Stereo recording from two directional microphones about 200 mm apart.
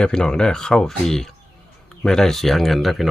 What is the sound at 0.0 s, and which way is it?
Speech, 5° left (ahead or behind).